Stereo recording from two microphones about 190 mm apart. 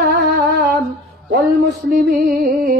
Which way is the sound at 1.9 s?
50° right (ahead or behind).